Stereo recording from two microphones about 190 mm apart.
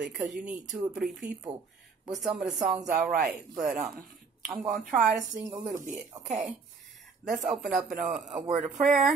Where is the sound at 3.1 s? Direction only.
45° right (ahead or behind).